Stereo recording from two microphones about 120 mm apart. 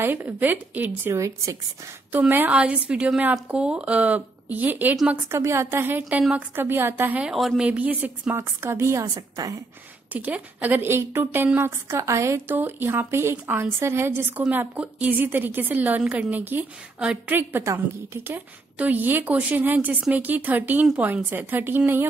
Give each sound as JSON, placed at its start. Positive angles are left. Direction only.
{"t": 0.0, "sound": "a woman's voice", "side_deg": -15}
{"t": 2.1, "sound": "a woman's voice", "side_deg": -15}
{"t": 5.3, "sound": "a woman's voice", "side_deg": -25}
{"t": 10.1, "sound": "a woman's voice", "side_deg": -15}